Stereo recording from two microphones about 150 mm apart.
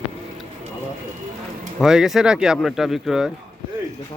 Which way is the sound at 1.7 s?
5° right (ahead or behind).